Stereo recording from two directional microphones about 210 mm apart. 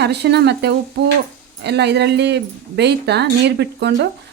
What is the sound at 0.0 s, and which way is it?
A woman's voice, 50° right (ahead or behind).